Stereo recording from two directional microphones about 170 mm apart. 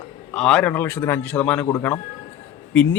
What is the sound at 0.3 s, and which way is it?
Speech, 5° left (ahead or behind).